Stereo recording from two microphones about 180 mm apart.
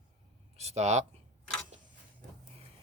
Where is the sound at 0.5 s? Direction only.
35° right (ahead or behind).